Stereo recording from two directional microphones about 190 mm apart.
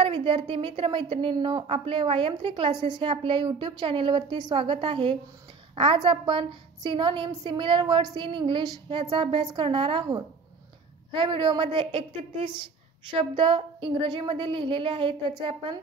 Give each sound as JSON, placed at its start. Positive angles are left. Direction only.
{"t": 0.0, "sound": "a woman's voice", "side_deg": -25}